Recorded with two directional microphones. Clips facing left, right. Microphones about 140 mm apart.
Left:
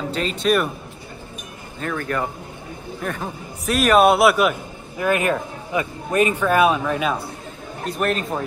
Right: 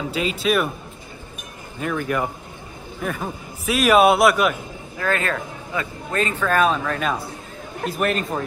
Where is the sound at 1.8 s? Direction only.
10° right (ahead or behind).